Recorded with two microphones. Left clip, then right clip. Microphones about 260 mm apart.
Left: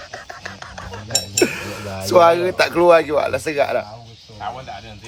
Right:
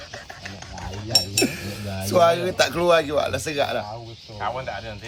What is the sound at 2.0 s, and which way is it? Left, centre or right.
Speech, centre.